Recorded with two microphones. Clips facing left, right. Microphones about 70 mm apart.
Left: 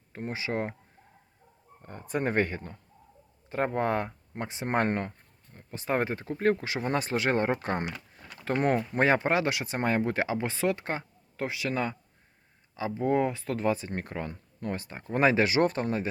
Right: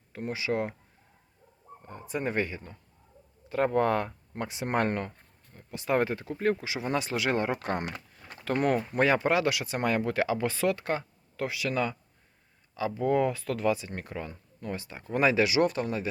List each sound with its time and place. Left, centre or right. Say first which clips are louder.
0.1 s speech: right 2 dB; left
1.8 s speech: left 2 dB; left
3.5 s speech: right 2 dB; left
6.4 s speech: left 2 dB; left